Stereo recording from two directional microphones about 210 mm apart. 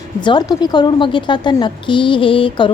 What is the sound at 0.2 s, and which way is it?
A woman's voice, 20° left (ahead or behind).